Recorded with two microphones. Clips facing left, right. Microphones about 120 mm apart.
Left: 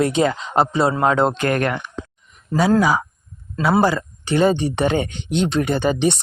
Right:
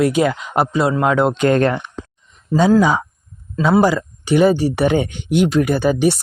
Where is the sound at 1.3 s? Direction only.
25° right (ahead or behind).